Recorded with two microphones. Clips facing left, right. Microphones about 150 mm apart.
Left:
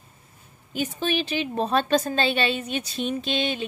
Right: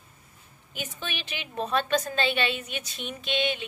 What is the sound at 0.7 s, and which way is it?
A woman's voice, 35° left (ahead or behind).